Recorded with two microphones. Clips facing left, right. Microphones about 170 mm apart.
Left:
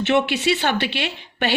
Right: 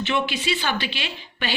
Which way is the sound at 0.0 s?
65° left (ahead or behind).